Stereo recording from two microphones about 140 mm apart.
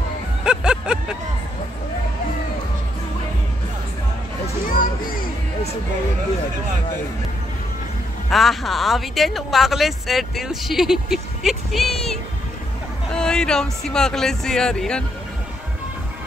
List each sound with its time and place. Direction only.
0.5 s a sound: 5° right (ahead or behind)
4.6 s music: 85° left
8.3 s speech: centre (ahead or behind)